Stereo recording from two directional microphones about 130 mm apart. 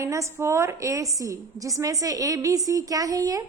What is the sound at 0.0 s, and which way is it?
A woman's voice, 25° right (ahead or behind).